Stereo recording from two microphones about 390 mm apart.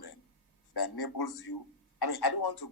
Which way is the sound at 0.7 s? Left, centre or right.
Left.